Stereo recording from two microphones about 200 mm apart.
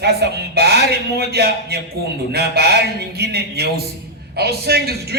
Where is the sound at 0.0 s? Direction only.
55° right (ahead or behind).